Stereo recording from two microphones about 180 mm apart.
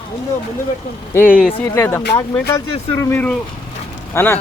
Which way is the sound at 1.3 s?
50° left (ahead or behind).